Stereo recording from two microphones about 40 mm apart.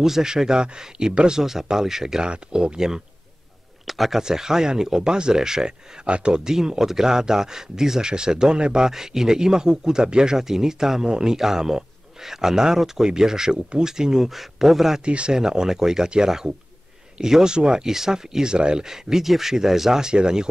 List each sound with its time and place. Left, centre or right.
0.0 s a man's voice: centre
1.4 s a man's voice: centre
2.2 s speech: right
3.8 s speech: centre
4.2 s a man's voice: centre
6.0 s a man's voice: right; by 15.0 s centre
15.0 s speech: right
15.3 s a man's voice: centre